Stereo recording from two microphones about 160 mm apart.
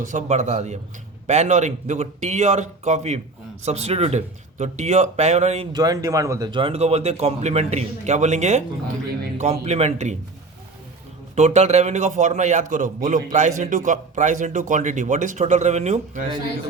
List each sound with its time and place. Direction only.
0.0 s a man's voice: 50° right (ahead or behind)
5.7 s a man's voice: 25° right (ahead or behind); by 10.2 s 45° right (ahead or behind)
11.3 s a man's voice: 45° right (ahead or behind)